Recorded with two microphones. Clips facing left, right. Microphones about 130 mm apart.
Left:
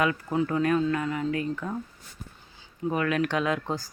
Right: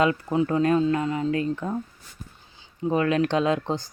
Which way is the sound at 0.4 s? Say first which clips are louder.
Right 3 dB; 30° right (ahead or behind).